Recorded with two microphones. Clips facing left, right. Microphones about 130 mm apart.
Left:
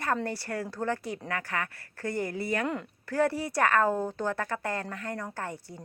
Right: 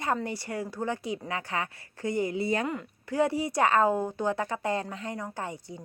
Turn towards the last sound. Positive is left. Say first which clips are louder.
# right 1 dB
turn(degrees=-15)  # may be behind; listen again after turning